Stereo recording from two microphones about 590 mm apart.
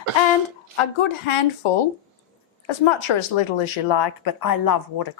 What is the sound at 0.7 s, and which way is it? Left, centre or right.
Speech, left.